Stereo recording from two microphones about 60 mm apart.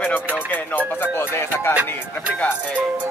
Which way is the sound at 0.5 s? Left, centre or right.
Left.